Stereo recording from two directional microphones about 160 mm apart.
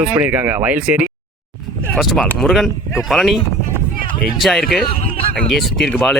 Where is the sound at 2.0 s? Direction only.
Centre (ahead or behind).